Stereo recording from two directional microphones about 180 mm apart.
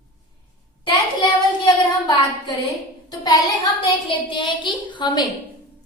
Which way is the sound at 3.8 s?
25° left (ahead or behind).